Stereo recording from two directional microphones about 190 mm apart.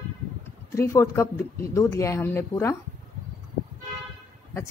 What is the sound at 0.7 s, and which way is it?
A woman's voice, 15° left (ahead or behind).